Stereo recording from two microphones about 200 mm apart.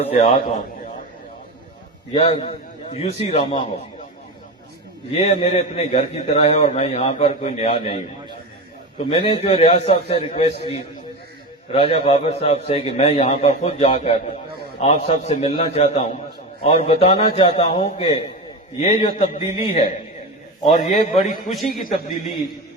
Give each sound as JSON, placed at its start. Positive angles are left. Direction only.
{"t": 0.0, "sound": "a man's voice", "side_deg": 30}
{"t": 2.1, "sound": "a man's voice", "side_deg": 30}
{"t": 5.1, "sound": "a man's voice", "side_deg": 30}
{"t": 9.0, "sound": "a man's voice", "side_deg": 25}
{"t": 11.7, "sound": "a man's voice", "side_deg": 30}
{"t": 20.7, "sound": "a man's voice", "side_deg": 40}